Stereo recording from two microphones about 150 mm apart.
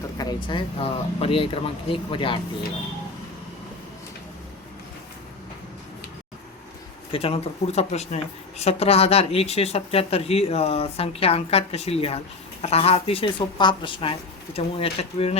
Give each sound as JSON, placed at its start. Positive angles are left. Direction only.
{"t": 0.2, "sound": "speech", "side_deg": 30}
{"t": 7.1, "sound": "speech", "side_deg": 40}